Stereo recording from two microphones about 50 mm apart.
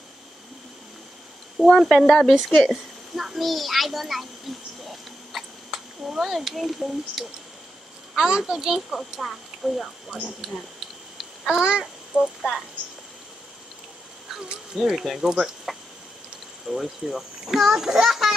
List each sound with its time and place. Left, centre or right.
1.6 s speech: centre
2.7 s a sound: centre
6.0 s a child's voice: centre
11.4 s a child's voice: centre
12.2 s speech: centre
15.0 s a child's voice: centre
16.6 s a child's voice: centre